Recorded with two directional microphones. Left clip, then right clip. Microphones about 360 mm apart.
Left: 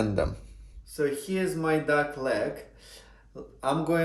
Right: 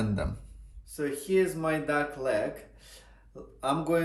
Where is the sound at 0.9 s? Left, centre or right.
Centre.